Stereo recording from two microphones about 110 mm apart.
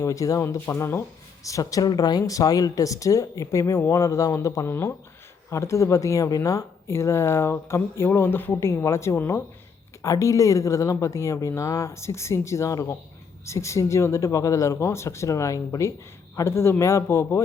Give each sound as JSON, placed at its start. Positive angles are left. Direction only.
{"t": 0.0, "sound": "a woman's voice", "side_deg": 30}